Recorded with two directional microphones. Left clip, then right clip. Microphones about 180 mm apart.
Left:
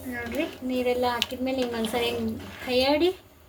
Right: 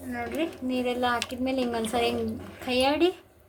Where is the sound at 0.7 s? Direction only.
30° right (ahead or behind).